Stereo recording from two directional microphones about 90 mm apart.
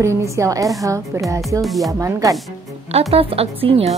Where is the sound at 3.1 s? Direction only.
90° right.